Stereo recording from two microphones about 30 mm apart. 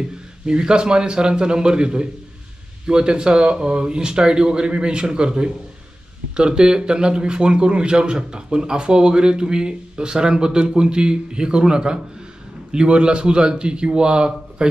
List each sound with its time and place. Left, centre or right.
0.5 s a man's voice: right